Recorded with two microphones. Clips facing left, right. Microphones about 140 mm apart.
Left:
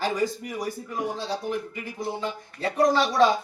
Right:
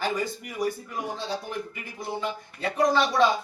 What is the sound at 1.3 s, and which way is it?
Speech, 35° left (ahead or behind).